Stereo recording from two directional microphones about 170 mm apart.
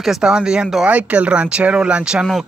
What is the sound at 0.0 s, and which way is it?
Speech, 5° right (ahead or behind).